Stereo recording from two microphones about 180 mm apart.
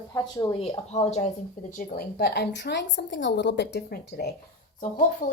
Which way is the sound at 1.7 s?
60° left (ahead or behind).